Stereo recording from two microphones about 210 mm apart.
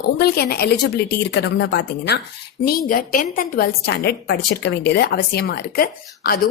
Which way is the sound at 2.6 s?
45° left (ahead or behind).